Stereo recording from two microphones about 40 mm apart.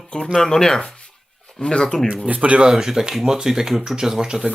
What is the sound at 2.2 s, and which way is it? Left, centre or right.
Speech, right.